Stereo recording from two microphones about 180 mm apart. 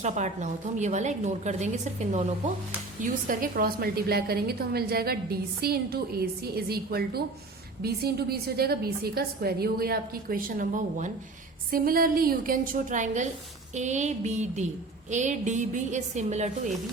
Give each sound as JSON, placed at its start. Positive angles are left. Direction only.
{"t": 0.0, "sound": "a woman's voice", "side_deg": -40}
{"t": 3.0, "sound": "a woman's voice", "side_deg": -50}